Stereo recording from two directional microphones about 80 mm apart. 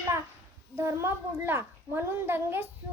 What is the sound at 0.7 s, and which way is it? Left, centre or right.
A child's voice, right.